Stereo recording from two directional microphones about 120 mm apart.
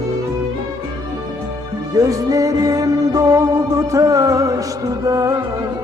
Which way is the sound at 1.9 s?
30° right (ahead or behind).